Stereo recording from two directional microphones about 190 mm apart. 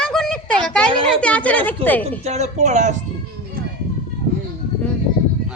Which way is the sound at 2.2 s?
35° right (ahead or behind).